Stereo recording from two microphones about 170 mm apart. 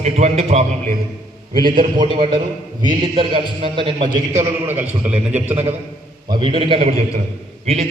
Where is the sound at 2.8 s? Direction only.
25° right (ahead or behind).